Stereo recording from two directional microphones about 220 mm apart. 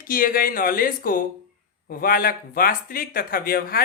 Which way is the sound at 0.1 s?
40° left (ahead or behind).